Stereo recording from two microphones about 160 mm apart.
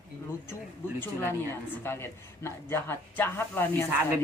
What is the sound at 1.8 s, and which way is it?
Speech, 15° left (ahead or behind).